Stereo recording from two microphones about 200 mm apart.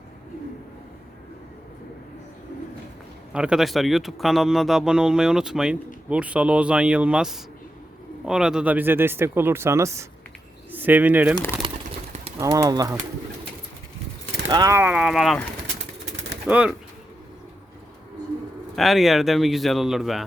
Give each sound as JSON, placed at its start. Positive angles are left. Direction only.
{"t": 3.3, "sound": "speech", "side_deg": -5}
{"t": 11.6, "sound": "pigeon", "side_deg": -25}
{"t": 12.4, "sound": "speech", "side_deg": -15}
{"t": 14.5, "sound": "speech", "side_deg": -15}
{"t": 16.5, "sound": "speech", "side_deg": -5}
{"t": 18.8, "sound": "speech", "side_deg": 0}